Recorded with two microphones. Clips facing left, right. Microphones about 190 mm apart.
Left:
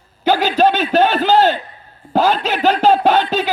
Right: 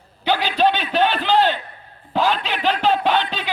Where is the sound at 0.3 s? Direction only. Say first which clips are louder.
Left 5 dB; 45° left (ahead or behind).